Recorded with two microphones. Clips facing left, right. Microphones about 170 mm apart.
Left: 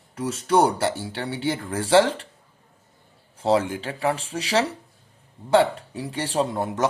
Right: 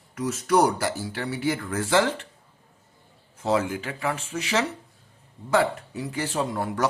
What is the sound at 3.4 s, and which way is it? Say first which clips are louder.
Speech: left 3 dB; 30° left (ahead or behind).